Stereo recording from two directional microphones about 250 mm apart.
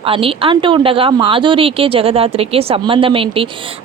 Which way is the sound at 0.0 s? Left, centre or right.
Right.